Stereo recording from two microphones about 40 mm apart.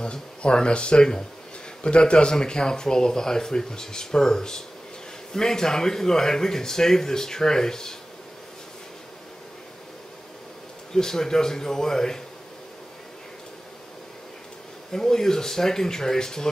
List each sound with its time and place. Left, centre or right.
0.0 s speech: left
10.9 s speech: centre
14.9 s speech: centre